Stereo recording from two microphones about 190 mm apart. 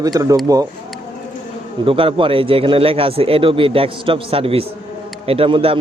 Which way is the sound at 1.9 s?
30° right (ahead or behind).